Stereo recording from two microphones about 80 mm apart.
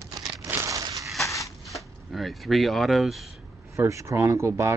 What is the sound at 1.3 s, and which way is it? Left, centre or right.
Shuffling cards, left.